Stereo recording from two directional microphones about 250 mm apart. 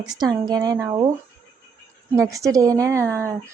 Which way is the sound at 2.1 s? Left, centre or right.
Centre.